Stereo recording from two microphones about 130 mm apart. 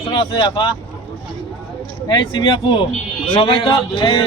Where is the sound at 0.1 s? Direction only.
35° left (ahead or behind).